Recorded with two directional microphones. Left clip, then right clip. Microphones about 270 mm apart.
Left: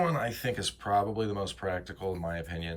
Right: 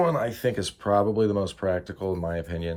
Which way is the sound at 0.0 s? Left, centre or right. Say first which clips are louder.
Right 6 dB; centre.